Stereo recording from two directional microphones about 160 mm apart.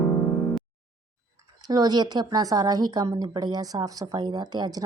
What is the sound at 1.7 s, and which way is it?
Speech, 25° right (ahead or behind).